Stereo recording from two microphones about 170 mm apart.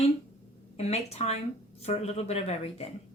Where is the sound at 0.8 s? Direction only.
40° left (ahead or behind).